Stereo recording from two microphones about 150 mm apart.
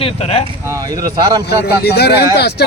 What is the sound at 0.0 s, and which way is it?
Speech, 40° left (ahead or behind).